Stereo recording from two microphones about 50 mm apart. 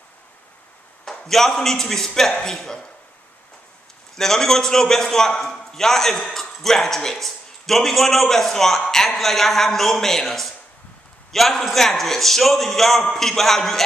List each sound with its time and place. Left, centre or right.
1.0 s a man's voice: centre
4.1 s a man's voice: centre